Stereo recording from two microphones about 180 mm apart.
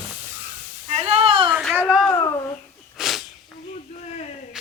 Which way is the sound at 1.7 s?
5° right (ahead or behind).